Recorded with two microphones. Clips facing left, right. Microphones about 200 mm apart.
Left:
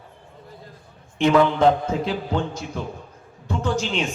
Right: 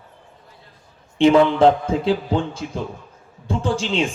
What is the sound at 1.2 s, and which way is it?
A man's voice, 30° right (ahead or behind).